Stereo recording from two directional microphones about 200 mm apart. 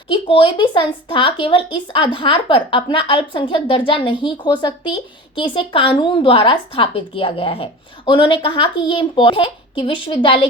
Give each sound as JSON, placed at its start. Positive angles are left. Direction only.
{"t": 0.1, "sound": "a woman's voice", "side_deg": 25}